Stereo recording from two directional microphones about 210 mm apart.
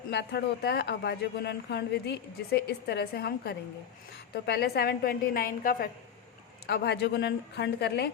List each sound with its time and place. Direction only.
0.1 s speech: 55° left (ahead or behind)